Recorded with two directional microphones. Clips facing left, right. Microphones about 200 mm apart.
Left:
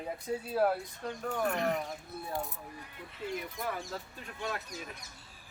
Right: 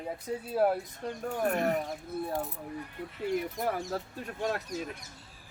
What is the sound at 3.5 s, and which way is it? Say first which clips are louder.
Speech: right 6 dB; 45° right (ahead or behind).